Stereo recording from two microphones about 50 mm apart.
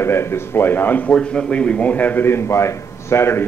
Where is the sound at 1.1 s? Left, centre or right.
Centre; by 2.3 s left.